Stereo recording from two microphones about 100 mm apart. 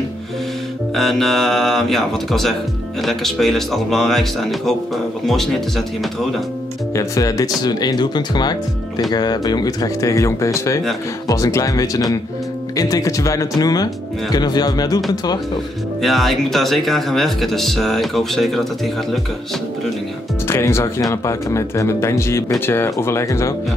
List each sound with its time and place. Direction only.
0.9 s speech: centre (ahead or behind)
7.0 s speech: 35° left (ahead or behind)
16.0 s speech: centre (ahead or behind)
20.4 s speech: 25° left (ahead or behind)